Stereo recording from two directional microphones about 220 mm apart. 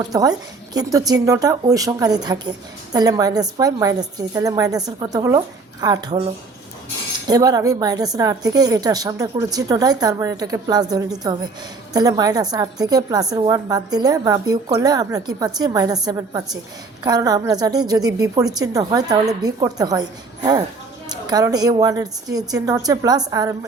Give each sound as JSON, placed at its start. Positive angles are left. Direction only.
{"t": 0.1, "sound": "a woman's voice", "side_deg": -15}
{"t": 7.3, "sound": "a woman's voice", "side_deg": -15}